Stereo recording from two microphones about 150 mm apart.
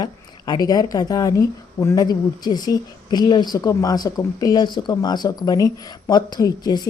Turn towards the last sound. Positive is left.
turn(degrees=25)  # may be behind; listen again after turning